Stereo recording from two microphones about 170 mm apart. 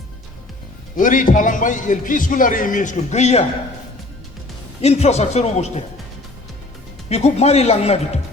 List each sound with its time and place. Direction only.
0.9 s a man's voice: 50° left (ahead or behind)
4.8 s speech: 40° left (ahead or behind)
7.1 s speech: 40° left (ahead or behind)